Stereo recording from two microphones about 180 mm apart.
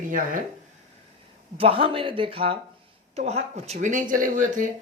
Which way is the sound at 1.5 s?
30° right (ahead or behind).